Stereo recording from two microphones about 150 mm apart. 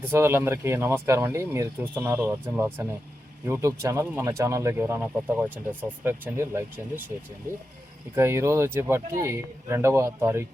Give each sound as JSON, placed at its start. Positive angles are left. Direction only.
{"t": 0.0, "sound": "speech", "side_deg": -15}
{"t": 8.1, "sound": "speech", "side_deg": -15}